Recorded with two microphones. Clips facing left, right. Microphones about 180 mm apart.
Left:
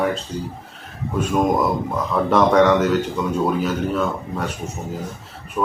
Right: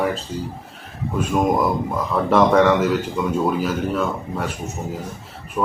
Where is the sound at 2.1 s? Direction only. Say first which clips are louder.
Even; centre (ahead or behind).